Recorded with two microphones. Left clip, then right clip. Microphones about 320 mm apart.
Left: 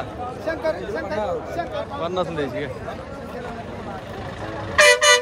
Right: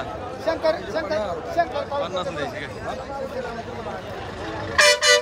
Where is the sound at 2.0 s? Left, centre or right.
Centre.